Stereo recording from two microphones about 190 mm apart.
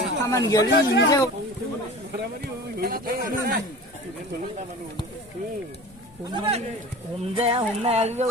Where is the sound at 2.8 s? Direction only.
50° right (ahead or behind).